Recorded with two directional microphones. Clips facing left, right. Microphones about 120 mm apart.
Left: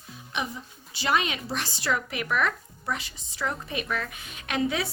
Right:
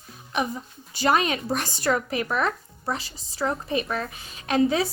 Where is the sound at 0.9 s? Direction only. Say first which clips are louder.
Right 4 dB; 45° right (ahead or behind).